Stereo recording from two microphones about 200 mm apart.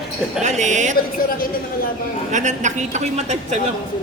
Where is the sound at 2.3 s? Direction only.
35° right (ahead or behind).